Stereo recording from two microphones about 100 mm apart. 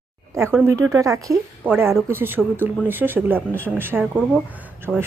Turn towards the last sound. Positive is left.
turn(degrees=-20)  # may be behind; listen again after turning